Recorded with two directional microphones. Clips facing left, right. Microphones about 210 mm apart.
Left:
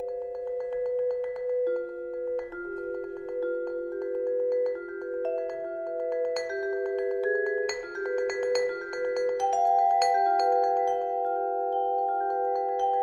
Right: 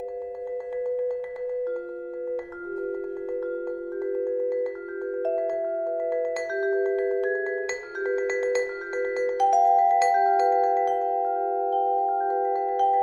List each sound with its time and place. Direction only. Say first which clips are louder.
8.0 s music: right 3 dB; 5° right (ahead or behind)
9.4 s music: right 5 dB; 55° right (ahead or behind)
9.8 s music: right 3 dB; 5° right (ahead or behind)